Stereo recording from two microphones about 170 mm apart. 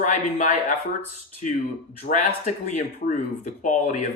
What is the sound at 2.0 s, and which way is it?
Speech, 45° left (ahead or behind).